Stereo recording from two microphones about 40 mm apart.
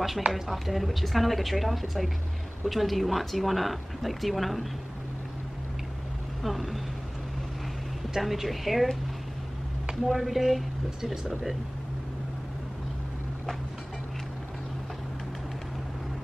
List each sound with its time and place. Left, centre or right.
0.3 s speech: centre
6.4 s speech: centre
8.2 s speech: centre
10.0 s speech: centre